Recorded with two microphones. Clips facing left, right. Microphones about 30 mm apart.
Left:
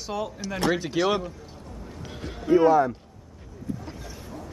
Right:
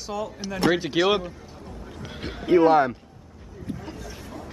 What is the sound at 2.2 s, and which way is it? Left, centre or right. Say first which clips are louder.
Music: right 1 dB; right.